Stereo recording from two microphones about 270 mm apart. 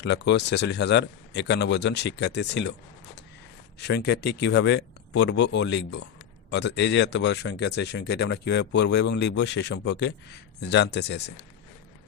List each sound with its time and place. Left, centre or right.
0.0 s speech: left
3.8 s speech: left